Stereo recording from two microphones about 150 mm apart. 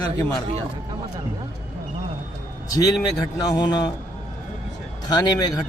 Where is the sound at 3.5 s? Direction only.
30° left (ahead or behind).